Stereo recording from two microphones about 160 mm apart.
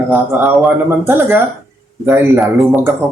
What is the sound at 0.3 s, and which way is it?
Speech, 5° right (ahead or behind).